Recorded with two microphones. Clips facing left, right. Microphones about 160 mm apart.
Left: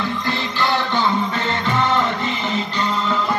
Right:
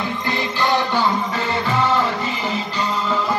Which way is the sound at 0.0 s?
15° right (ahead or behind).